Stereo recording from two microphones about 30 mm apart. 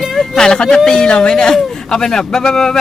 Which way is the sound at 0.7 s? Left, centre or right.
Left.